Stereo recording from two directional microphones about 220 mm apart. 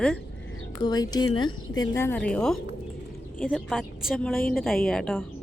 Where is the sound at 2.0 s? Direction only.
10° left (ahead or behind).